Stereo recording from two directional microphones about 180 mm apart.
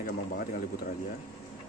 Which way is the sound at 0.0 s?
50° left (ahead or behind).